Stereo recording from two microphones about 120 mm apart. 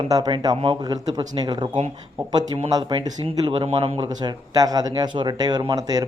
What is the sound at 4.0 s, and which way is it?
Speech, 30° right (ahead or behind).